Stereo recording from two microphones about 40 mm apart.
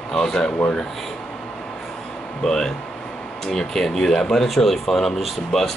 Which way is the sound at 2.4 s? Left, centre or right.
Centre.